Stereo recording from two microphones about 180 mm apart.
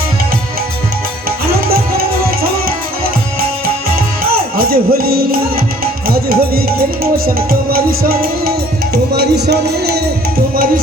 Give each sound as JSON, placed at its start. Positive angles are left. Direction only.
{"t": 4.3, "sound": "music", "side_deg": -55}